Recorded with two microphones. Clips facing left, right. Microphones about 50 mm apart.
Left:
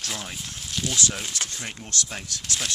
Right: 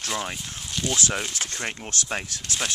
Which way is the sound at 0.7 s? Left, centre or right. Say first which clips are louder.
Right 2 dB; centre.